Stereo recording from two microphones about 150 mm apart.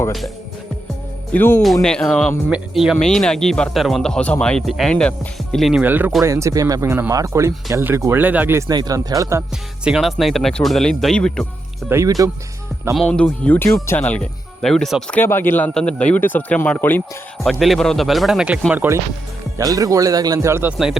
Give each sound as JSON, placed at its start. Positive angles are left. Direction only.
{"t": 1.3, "sound": "speech", "side_deg": 10}
{"t": 5.8, "sound": "speech", "side_deg": -10}
{"t": 9.8, "sound": "speech", "side_deg": -5}
{"t": 11.9, "sound": "speech", "side_deg": -20}
{"t": 12.9, "sound": "speech", "side_deg": 5}
{"t": 17.4, "sound": "speech", "side_deg": 0}
{"t": 19.5, "sound": "speech", "side_deg": -25}